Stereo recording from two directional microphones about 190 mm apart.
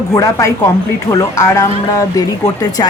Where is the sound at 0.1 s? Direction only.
15° left (ahead or behind).